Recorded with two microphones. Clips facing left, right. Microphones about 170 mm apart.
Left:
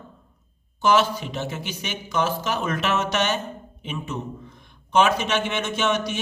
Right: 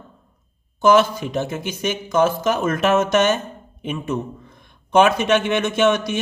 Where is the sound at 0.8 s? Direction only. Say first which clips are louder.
Right 5 dB; 50° right (ahead or behind).